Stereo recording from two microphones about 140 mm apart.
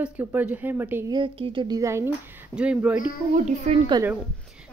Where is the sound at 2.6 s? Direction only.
10° right (ahead or behind).